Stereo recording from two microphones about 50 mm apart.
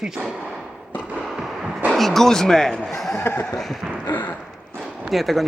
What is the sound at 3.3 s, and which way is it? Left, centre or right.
Speech, left.